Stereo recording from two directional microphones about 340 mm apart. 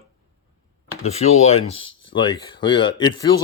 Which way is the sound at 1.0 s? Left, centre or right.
Centre.